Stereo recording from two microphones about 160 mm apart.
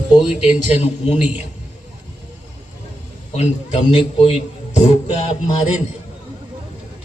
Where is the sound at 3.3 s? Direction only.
40° left (ahead or behind).